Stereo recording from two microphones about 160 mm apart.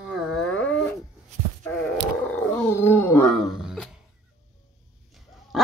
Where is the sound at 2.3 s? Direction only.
10° left (ahead or behind).